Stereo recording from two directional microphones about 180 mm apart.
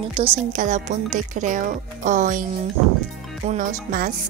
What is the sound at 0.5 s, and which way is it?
Speech, 45° right (ahead or behind).